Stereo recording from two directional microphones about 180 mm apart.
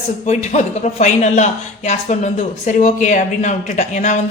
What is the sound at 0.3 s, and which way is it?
A man's voice, 40° left (ahead or behind).